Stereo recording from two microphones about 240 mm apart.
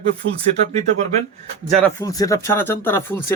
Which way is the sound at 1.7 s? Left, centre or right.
Centre.